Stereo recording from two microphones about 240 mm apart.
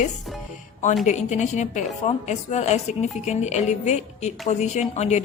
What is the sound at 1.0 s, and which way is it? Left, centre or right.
A woman's voice, left.